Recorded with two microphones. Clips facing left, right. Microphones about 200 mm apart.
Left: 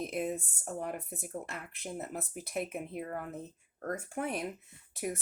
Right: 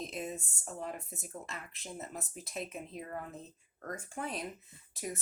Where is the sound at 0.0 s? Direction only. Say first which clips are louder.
Left 5 dB; 60° left (ahead or behind).